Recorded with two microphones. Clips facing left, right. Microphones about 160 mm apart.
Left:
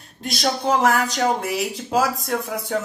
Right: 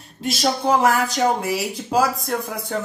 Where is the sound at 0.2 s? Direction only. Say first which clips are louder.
Right 2 dB; centre (ahead or behind).